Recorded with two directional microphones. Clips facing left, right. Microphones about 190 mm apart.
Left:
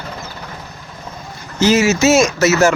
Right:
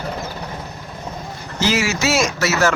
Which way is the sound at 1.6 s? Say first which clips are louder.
Left 7 dB; 20° left (ahead or behind).